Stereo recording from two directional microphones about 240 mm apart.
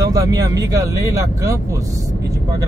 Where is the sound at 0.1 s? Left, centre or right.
Centre.